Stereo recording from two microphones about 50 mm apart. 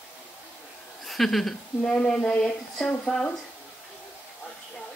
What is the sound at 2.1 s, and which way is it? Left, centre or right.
A woman's voice, centre.